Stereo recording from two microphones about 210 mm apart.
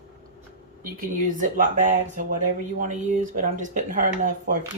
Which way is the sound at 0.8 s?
40° right (ahead or behind).